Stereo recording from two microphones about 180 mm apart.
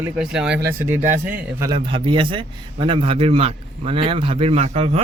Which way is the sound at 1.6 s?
25° right (ahead or behind).